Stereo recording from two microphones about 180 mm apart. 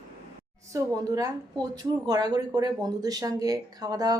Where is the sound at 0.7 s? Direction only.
20° right (ahead or behind).